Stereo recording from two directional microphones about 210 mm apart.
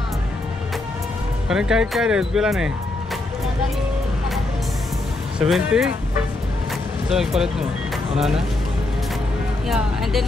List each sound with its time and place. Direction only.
1.5 s speech: 5° right (ahead or behind)
5.4 s speech: centre (ahead or behind)
7.1 s speech: centre (ahead or behind)
9.7 s speech: centre (ahead or behind)